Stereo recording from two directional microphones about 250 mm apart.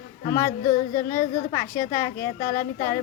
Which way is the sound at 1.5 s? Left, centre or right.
Centre.